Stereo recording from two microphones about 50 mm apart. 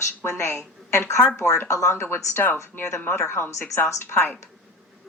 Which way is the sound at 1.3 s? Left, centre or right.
Left.